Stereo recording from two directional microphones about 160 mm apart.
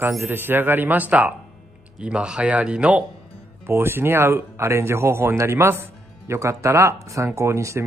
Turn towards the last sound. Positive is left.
turn(degrees=-15)  # may be behind; listen again after turning